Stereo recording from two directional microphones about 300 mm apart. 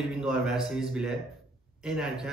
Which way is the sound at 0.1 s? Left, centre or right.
Centre.